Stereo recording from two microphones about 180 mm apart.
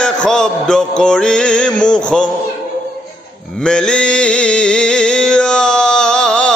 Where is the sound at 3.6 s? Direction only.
5° left (ahead or behind).